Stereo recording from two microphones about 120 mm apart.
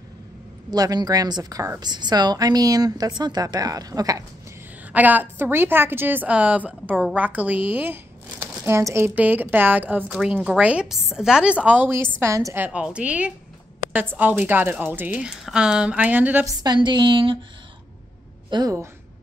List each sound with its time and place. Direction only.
0.7 s a woman's voice: 35° right (ahead or behind)
4.9 s a woman's voice: 15° right (ahead or behind)
12.5 s speech: 10° right (ahead or behind)
16.4 s a woman's voice: 35° right (ahead or behind)
18.5 s a woman's voice: 30° right (ahead or behind)